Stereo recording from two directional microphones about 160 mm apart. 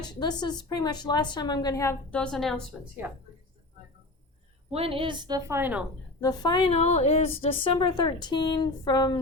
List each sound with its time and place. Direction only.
0.0 s a woman's voice: 25° left (ahead or behind)
2.0 s a woman's voice: 5° left (ahead or behind)
3.0 s speech: 15° right (ahead or behind)
4.7 s a woman's voice: 35° right (ahead or behind); by 5.8 s 15° right (ahead or behind)
6.1 s a woman's voice: 25° left (ahead or behind)
6.7 s a woman's voice: 45° left (ahead or behind); by 9.1 s 25° left (ahead or behind)